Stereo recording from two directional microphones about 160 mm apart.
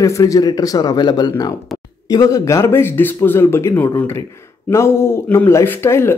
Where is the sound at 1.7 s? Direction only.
Centre (ahead or behind).